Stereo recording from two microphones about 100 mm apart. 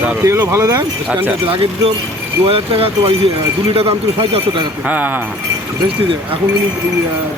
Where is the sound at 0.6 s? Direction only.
35° right (ahead or behind).